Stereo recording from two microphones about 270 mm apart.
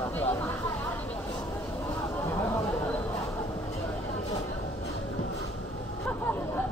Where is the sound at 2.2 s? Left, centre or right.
Centre.